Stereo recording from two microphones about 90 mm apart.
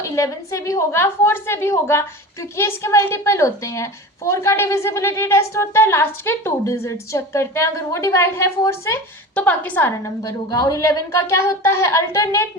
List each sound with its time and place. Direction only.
0.0 s a woman's voice: 35° left (ahead or behind)
9.3 s a woman's voice: 15° left (ahead or behind)
10.2 s a woman's voice: 40° left (ahead or behind)